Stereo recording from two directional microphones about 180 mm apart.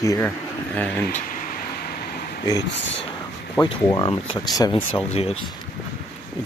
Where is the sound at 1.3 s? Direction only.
55° left (ahead or behind).